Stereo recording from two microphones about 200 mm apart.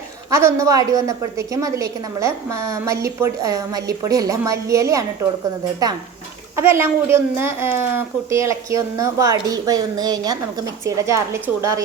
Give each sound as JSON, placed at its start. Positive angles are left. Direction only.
{"t": 0.3, "sound": "a woman's voice", "side_deg": -15}
{"t": 6.6, "sound": "a woman's voice", "side_deg": -10}